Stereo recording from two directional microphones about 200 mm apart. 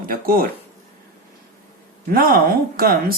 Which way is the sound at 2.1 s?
45° right (ahead or behind).